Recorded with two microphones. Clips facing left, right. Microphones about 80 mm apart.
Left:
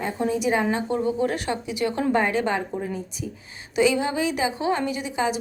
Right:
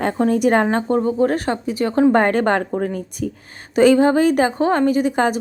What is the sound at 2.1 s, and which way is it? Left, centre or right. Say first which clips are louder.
A woman's voice: right 6 dB; right.